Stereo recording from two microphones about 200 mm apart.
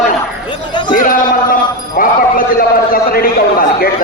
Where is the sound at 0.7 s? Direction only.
20° left (ahead or behind).